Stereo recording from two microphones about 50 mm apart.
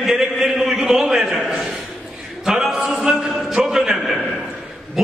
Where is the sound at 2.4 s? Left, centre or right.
Centre.